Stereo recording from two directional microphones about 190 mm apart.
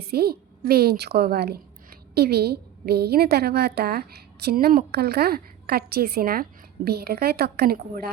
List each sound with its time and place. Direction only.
0.0 s a woman's voice: 55° right (ahead or behind)